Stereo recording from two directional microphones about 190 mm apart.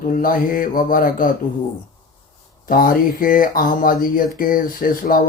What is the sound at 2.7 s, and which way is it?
Speech, 50° left (ahead or behind).